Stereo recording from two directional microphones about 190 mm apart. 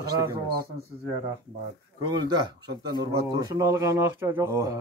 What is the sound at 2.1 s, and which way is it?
Speech, 20° right (ahead or behind).